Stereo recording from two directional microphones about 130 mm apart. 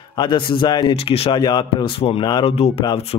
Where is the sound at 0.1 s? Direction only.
35° left (ahead or behind).